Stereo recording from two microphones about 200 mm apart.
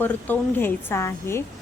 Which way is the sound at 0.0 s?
10° left (ahead or behind).